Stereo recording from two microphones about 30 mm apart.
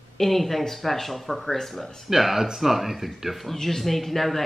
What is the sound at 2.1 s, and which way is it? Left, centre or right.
Speech, centre.